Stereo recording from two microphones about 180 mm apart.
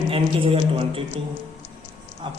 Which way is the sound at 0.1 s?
30° right (ahead or behind).